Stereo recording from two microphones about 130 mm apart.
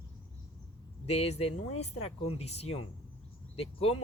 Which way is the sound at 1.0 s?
55° left (ahead or behind).